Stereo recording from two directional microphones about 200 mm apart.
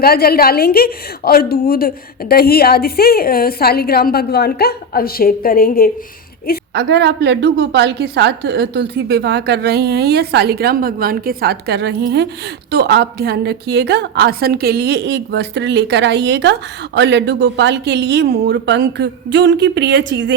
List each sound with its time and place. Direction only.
0.0 s a woman's voice: 50° left (ahead or behind)
6.7 s a woman's voice: 60° right (ahead or behind)